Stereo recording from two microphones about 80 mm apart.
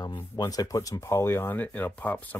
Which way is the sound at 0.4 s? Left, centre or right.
Left.